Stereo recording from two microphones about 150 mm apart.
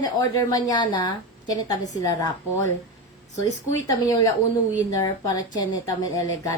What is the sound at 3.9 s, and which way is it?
A woman's voice, 25° left (ahead or behind).